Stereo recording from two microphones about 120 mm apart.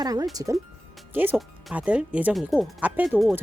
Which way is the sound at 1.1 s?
15° right (ahead or behind).